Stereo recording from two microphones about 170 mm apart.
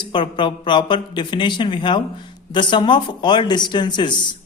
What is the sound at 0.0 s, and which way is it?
Speech, 30° left (ahead or behind).